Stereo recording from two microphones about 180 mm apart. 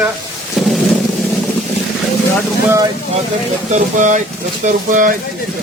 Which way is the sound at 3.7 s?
45° right (ahead or behind).